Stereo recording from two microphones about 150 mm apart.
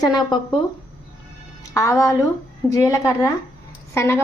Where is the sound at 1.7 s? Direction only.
20° left (ahead or behind).